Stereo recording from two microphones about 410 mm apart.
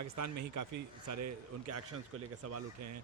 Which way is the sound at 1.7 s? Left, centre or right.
Right.